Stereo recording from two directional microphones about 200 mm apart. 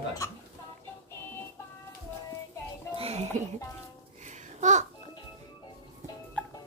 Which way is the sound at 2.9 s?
30° right (ahead or behind).